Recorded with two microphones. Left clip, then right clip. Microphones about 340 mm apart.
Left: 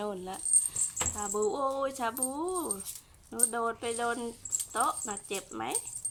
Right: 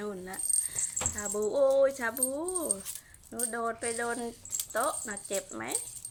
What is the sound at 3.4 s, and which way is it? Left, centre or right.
A woman's voice, centre.